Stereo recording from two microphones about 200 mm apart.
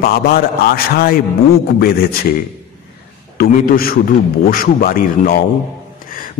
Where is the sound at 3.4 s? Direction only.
45° left (ahead or behind).